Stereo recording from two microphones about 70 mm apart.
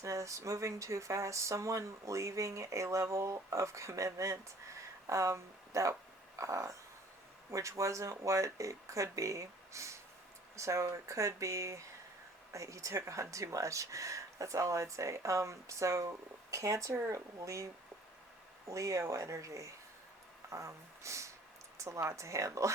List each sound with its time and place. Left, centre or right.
0.0 s speech: right
6.3 s a sound: right
7.5 s speech: right